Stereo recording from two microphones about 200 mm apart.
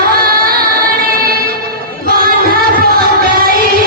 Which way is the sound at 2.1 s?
45° right (ahead or behind).